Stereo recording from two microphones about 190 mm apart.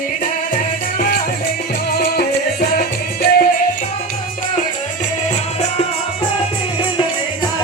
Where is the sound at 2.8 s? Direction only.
50° left (ahead or behind).